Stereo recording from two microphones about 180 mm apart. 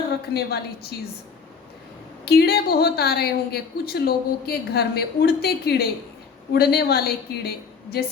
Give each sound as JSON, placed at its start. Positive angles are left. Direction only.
{"t": 0.3, "sound": "a woman's voice", "side_deg": 60}
{"t": 2.2, "sound": "a woman's voice", "side_deg": 60}